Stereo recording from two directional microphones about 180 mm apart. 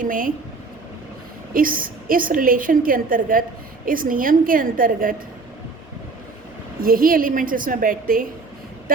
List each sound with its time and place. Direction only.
0.0 s a woman's voice: 50° right (ahead or behind)
1.5 s a woman's voice: 50° right (ahead or behind)
6.8 s a woman's voice: 55° right (ahead or behind)